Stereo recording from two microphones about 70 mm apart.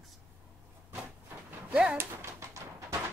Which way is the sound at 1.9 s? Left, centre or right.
Right.